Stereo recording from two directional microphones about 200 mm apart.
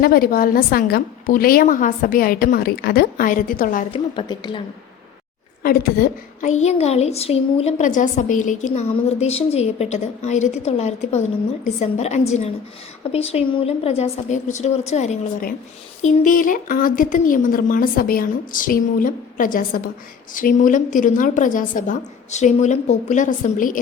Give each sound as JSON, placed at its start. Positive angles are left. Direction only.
{"t": 0.0, "sound": "speech", "side_deg": 45}
{"t": 3.9, "sound": "speech", "side_deg": 25}
{"t": 5.6, "sound": "speech", "side_deg": 50}
{"t": 6.5, "sound": "a woman's voice", "side_deg": 35}